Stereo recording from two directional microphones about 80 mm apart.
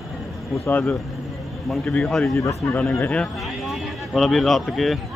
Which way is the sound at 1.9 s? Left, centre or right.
Centre.